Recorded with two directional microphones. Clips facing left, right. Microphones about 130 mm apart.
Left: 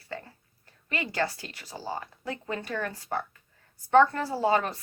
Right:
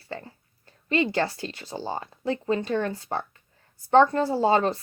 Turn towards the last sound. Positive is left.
turn(degrees=-30)  # may be behind; listen again after turning